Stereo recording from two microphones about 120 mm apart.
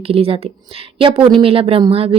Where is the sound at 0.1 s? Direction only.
55° right (ahead or behind).